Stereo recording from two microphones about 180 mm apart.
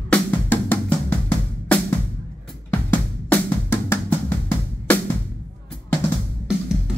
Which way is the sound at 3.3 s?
10° left (ahead or behind).